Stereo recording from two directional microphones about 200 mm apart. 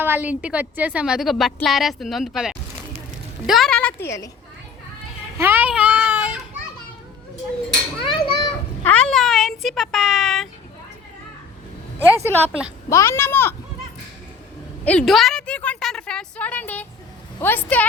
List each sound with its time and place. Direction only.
0.0 s a woman's voice: 10° right (ahead or behind); by 4.3 s 15° left (ahead or behind)
5.4 s a sound: 10° right (ahead or behind)
8.0 s children playing: 20° left (ahead or behind)
8.8 s a sound: 5° left (ahead or behind)
12.2 s a woman's voice: 10° left (ahead or behind)
14.8 s a woman's voice: 5° left (ahead or behind)